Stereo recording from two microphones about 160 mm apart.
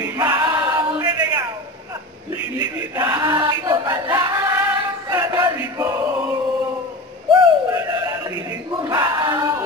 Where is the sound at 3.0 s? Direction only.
15° right (ahead or behind).